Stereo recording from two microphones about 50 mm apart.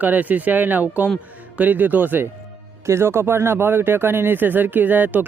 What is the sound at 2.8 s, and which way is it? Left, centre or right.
Speech, right.